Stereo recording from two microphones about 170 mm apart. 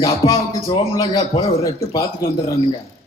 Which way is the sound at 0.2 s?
20° left (ahead or behind).